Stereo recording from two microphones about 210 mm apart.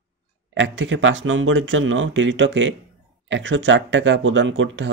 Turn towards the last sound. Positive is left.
turn(degrees=-60)  # may be behind; listen again after turning